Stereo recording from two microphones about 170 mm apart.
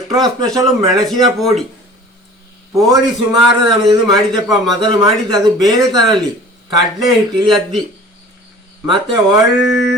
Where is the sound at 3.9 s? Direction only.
25° right (ahead or behind).